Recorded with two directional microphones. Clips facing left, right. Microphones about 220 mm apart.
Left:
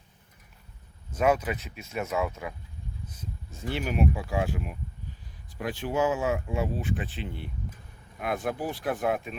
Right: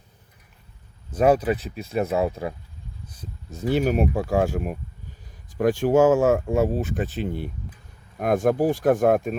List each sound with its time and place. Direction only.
1.1 s speech: 35° right (ahead or behind)